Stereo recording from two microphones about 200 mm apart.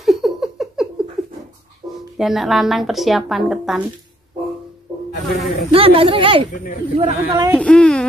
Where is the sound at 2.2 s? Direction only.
Centre (ahead or behind).